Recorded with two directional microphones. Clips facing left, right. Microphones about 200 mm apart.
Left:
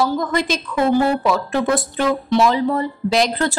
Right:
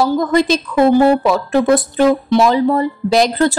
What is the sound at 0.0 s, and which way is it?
A woman's voice, 35° right (ahead or behind).